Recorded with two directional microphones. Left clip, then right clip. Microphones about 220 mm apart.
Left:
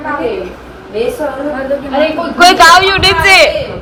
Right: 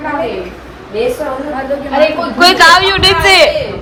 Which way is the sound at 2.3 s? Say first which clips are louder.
Left 2 dB; 5° right (ahead or behind).